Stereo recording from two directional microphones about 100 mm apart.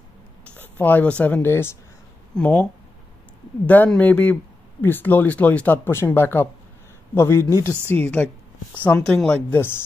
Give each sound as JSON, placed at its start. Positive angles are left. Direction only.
{"t": 0.6, "sound": "speech", "side_deg": 20}
{"t": 2.3, "sound": "speech", "side_deg": 10}
{"t": 7.9, "sound": "speech", "side_deg": 15}